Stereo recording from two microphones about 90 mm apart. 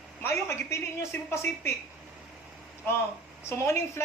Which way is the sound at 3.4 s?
30° left (ahead or behind).